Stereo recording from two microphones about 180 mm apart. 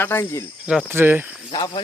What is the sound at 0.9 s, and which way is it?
Speech, 10° right (ahead or behind).